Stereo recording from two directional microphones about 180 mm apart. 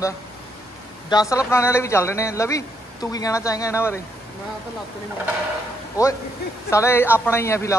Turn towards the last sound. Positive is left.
turn(degrees=15)  # may be behind; listen again after turning